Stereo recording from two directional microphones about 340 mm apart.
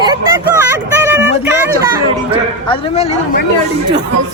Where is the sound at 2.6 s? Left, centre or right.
Centre.